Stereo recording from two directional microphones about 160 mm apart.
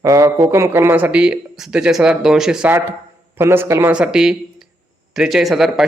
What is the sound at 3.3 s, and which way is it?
Speech, 15° right (ahead or behind).